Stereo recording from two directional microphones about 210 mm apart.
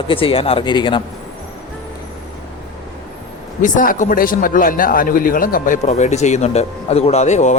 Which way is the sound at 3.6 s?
40° left (ahead or behind).